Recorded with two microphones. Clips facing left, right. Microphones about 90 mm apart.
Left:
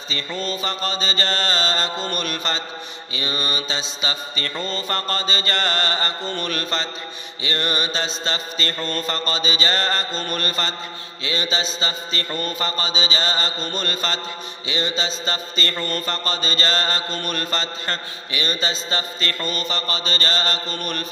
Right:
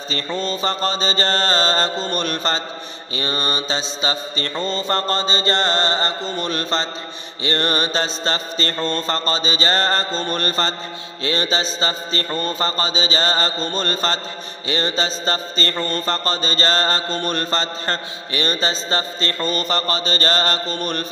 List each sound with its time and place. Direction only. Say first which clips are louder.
0.3 s mantra: right 4 dB; 30° right (ahead or behind)